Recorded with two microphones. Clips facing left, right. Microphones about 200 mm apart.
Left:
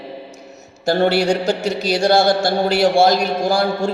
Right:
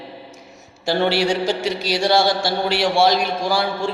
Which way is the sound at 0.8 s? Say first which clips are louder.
Left 3 dB; 45° left (ahead or behind).